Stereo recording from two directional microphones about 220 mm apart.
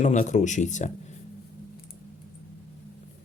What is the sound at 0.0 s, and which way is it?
Speech, 35° left (ahead or behind).